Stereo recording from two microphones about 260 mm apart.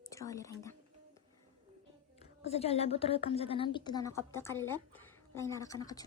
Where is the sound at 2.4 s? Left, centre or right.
Left.